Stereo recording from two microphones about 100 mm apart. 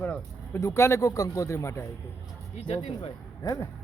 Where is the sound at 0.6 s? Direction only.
25° left (ahead or behind).